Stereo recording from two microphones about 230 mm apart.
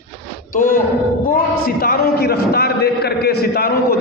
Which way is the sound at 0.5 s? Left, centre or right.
Left.